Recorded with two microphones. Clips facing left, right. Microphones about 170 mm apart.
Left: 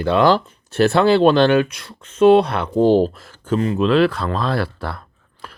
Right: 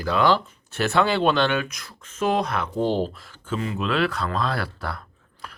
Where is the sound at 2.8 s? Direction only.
45° left (ahead or behind).